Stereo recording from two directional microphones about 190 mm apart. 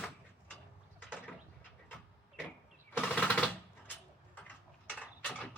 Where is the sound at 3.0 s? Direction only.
5° left (ahead or behind).